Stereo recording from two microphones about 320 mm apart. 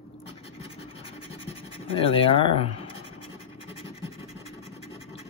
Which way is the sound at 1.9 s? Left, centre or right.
Centre.